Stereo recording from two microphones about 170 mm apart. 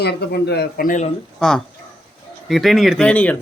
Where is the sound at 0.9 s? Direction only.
45° left (ahead or behind).